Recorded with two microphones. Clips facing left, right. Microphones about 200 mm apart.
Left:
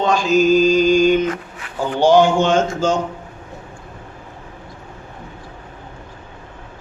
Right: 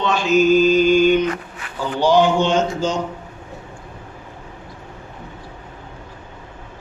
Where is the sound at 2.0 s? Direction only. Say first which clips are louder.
Left 2 dB; 50° left (ahead or behind).